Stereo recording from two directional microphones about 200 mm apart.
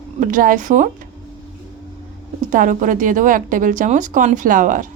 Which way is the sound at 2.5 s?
40° right (ahead or behind).